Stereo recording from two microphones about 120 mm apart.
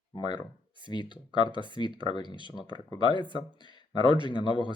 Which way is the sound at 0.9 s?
40° left (ahead or behind).